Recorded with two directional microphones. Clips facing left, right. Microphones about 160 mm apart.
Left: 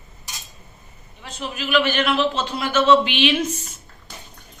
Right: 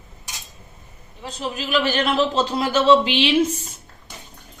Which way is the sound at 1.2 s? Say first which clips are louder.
Right 2 dB; 35° right (ahead or behind).